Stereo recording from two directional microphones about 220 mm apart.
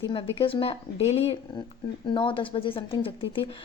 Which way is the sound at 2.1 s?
25° left (ahead or behind).